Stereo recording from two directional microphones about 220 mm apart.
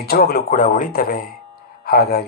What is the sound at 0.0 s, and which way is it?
Speech, 45° left (ahead or behind).